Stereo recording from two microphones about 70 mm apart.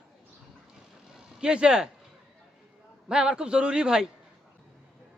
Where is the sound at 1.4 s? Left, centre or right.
Centre.